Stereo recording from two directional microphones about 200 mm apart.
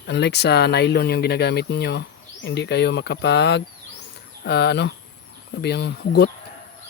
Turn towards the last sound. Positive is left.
turn(degrees=55)  # may be behind; listen again after turning